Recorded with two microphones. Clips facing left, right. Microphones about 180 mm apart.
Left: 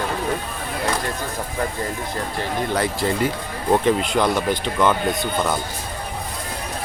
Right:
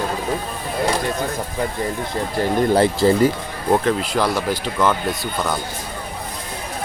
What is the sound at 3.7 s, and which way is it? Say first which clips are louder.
Speech: even; centre (ahead or behind).